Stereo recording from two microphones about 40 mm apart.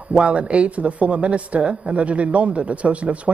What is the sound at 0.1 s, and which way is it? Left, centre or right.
Speech, right.